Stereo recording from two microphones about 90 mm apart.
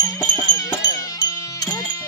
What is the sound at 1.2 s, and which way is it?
Music, 45° left (ahead or behind).